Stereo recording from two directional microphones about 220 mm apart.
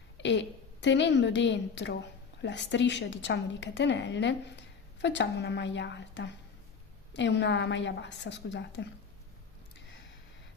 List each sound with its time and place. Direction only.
0.2 s a woman's voice: 55° left (ahead or behind)